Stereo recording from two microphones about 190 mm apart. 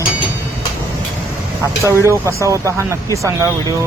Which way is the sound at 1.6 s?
15° right (ahead or behind).